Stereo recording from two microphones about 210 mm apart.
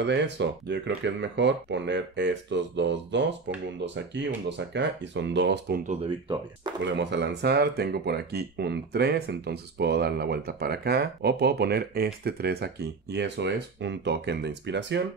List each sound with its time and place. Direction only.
0.0 s speech: 55° right (ahead or behind)
6.8 s speech: 55° right (ahead or behind)